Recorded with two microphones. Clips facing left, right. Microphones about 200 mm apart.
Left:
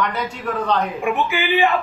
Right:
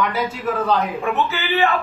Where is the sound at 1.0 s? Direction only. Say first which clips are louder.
Left 1 dB; 15° left (ahead or behind).